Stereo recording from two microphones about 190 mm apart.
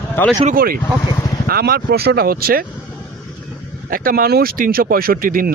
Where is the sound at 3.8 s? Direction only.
50° right (ahead or behind).